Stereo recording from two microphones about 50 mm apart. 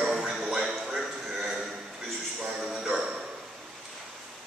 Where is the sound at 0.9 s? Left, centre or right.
Centre.